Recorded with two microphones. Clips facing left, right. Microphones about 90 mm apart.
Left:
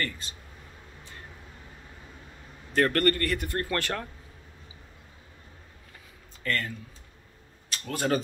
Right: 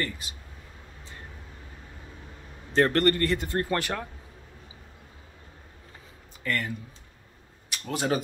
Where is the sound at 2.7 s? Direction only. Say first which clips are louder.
Right 2 dB; 25° right (ahead or behind).